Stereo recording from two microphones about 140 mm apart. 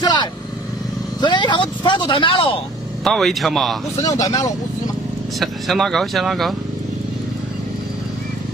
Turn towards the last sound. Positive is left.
turn(degrees=0)  # may be behind; listen again after turning